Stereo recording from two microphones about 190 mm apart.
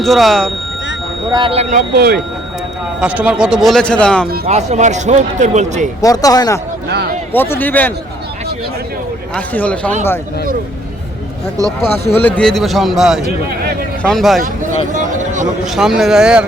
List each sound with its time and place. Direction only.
0.0 s speech: centre (ahead or behind)
1.3 s speech: 25° right (ahead or behind)
1.7 s speech: 50° right (ahead or behind)
3.0 s speech: 5° right (ahead or behind)
4.4 s speech: 35° right (ahead or behind)
6.0 s speech: 20° left (ahead or behind)
6.8 s a man's voice: 60° right (ahead or behind)
7.3 s speech: 10° left (ahead or behind)
9.3 s speech: 10° left (ahead or behind)
12.2 s speech: 5° left (ahead or behind)
14.9 s a sound: 40° right (ahead or behind)
15.6 s speech: centre (ahead or behind)